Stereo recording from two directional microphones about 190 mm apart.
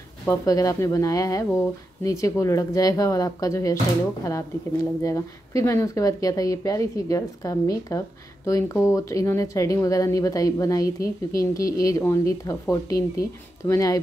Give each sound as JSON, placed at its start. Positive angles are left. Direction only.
{"t": 0.3, "sound": "speech", "side_deg": 20}